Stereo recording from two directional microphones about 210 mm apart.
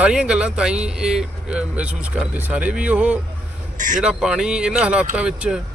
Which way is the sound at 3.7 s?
40° right (ahead or behind).